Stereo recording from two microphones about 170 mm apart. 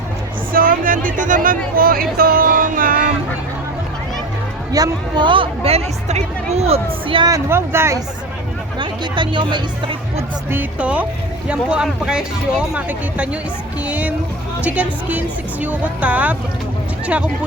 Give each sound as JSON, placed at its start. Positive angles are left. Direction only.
{"t": 0.5, "sound": "speech", "side_deg": -55}
{"t": 4.7, "sound": "speech", "side_deg": -25}
{"t": 8.8, "sound": "speech", "side_deg": -25}
{"t": 10.5, "sound": "speech", "side_deg": -10}